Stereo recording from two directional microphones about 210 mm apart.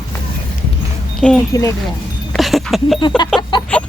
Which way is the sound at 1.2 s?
5° left (ahead or behind).